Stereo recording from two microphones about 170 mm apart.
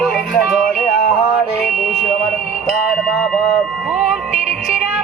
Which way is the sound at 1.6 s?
Centre (ahead or behind).